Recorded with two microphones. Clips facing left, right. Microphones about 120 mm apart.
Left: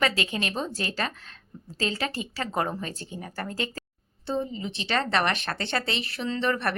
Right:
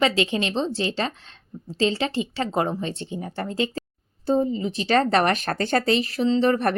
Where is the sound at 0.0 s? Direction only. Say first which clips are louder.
Right 5 dB; 30° right (ahead or behind).